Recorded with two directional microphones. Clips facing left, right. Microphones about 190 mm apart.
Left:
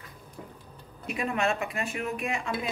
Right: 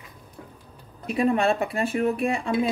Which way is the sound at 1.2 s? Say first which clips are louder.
Right 7 dB; 35° right (ahead or behind).